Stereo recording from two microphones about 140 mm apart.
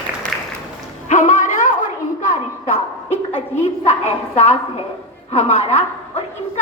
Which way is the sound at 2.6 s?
55° left (ahead or behind).